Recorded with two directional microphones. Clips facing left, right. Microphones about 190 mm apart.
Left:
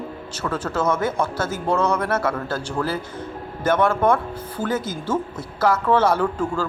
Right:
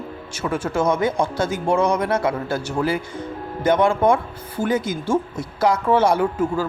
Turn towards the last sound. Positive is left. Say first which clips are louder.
# right 2 dB
turn(degrees=-10)  # may be behind; listen again after turning